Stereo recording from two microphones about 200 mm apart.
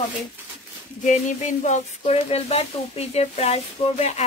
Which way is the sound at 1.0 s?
35° left (ahead or behind).